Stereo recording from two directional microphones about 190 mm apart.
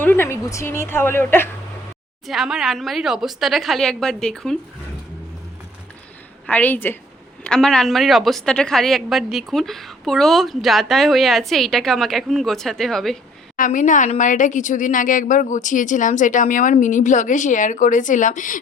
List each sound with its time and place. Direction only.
0.0 s a woman's voice: 10° left (ahead or behind)
2.2 s speech: centre (ahead or behind)
6.5 s a woman's voice: 10° left (ahead or behind)
13.6 s a woman's voice: 40° left (ahead or behind)